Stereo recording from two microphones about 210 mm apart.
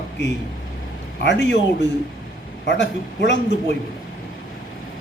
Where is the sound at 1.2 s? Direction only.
60° left (ahead or behind).